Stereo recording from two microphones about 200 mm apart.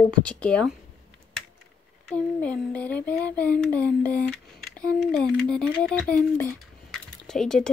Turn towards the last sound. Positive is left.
turn(degrees=5)  # may be behind; listen again after turning